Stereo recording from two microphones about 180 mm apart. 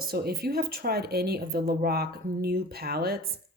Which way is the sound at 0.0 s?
60° right (ahead or behind).